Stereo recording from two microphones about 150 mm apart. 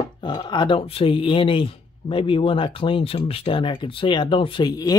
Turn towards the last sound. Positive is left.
turn(degrees=25)  # may be behind; listen again after turning